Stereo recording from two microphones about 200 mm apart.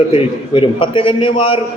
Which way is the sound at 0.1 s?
25° left (ahead or behind).